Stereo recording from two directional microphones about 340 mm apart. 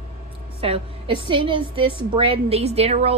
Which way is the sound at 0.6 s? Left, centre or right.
Centre.